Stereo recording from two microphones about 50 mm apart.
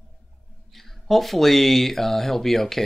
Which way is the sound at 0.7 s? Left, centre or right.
Centre.